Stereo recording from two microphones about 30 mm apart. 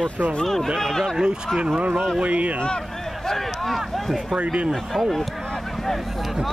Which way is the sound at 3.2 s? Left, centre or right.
Centre.